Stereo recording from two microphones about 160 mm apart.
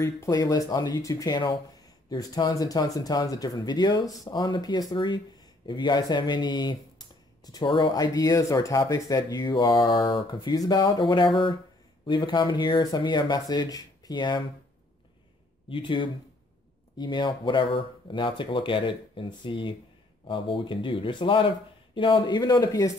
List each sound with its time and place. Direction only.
0.0 s speech: 20° left (ahead or behind)
15.7 s speech: 30° left (ahead or behind)